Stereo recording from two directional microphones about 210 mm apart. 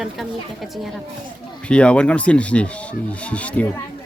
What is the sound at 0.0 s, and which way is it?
A woman's voice, centre (ahead or behind).